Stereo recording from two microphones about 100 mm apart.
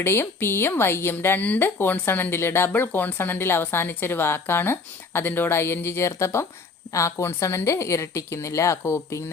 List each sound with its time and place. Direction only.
0.0 s a woman's voice: 25° left (ahead or behind)